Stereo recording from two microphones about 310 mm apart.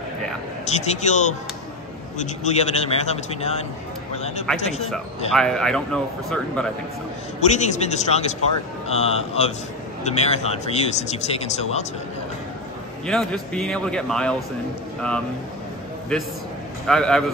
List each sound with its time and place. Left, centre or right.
0.7 s speech: left
5.3 s speech: centre
7.3 s speech: left
13.0 s speech: centre
16.8 s speech: centre